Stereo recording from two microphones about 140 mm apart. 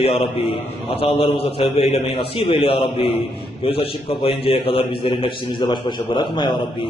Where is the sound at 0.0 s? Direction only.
40° left (ahead or behind).